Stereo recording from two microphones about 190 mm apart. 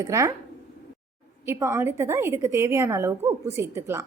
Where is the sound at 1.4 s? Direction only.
15° right (ahead or behind).